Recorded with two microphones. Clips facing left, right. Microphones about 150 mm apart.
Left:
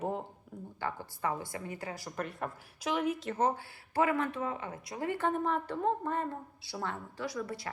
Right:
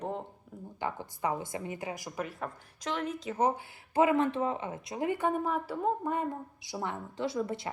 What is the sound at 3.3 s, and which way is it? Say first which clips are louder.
Speech: right 2 dB; 15° right (ahead or behind).